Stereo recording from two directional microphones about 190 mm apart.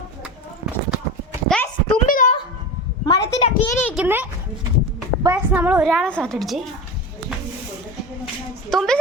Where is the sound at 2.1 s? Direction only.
45° left (ahead or behind).